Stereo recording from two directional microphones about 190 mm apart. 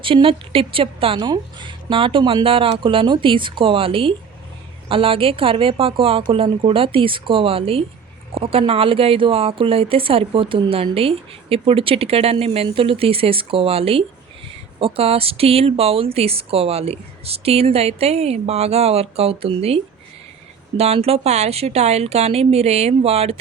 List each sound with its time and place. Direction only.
0.0 s speech: 25° right (ahead or behind)